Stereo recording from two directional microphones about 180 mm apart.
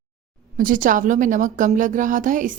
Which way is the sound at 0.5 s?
50° right (ahead or behind).